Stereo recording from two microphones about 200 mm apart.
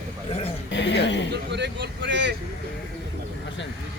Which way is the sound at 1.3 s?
60° right (ahead or behind).